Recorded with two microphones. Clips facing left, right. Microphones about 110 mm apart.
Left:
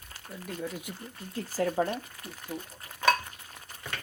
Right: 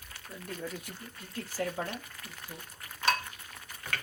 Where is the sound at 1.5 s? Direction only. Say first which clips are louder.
Left 7 dB; 35° left (ahead or behind).